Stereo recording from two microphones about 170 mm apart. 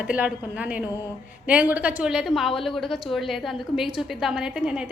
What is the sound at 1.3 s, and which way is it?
A woman's voice, 10° right (ahead or behind).